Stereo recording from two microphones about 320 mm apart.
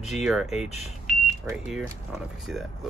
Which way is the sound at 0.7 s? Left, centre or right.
Centre.